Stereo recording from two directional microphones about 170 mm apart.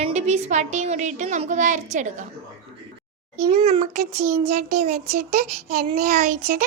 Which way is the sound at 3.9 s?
60° right (ahead or behind).